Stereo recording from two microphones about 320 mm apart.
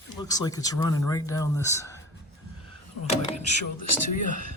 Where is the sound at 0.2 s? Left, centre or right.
Centre.